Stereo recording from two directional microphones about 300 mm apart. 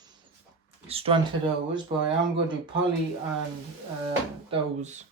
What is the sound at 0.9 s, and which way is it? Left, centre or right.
Speech, centre.